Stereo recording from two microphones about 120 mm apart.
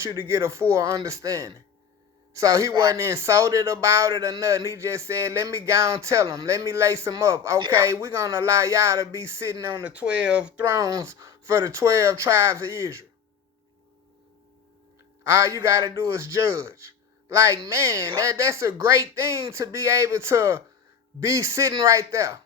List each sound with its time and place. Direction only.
0.0 s a man's voice: 20° right (ahead or behind)
10.6 s a man's voice: 25° right (ahead or behind)
15.2 s a man's voice: 20° right (ahead or behind)